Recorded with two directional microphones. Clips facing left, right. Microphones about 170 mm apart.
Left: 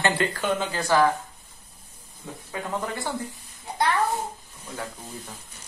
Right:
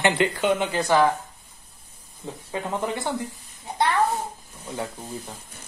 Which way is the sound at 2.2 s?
25° right (ahead or behind).